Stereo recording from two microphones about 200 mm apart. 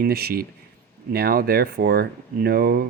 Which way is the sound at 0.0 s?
50° right (ahead or behind).